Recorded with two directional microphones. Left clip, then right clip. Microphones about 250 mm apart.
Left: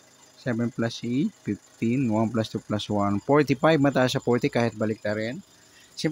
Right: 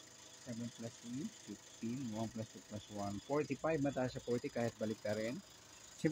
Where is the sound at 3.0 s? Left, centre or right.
Left.